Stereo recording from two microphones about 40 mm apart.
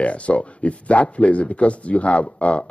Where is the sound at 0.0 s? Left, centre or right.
Left.